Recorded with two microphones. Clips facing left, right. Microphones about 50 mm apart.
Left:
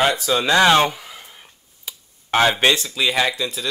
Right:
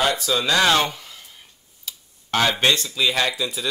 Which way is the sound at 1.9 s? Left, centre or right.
Left.